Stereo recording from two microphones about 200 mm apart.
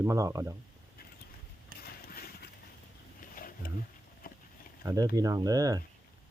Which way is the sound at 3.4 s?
45° left (ahead or behind).